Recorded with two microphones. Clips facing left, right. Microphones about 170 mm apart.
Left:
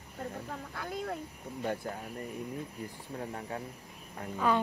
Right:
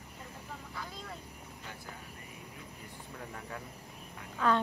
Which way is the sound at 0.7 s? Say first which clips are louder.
Left 9 dB; 60° left (ahead or behind).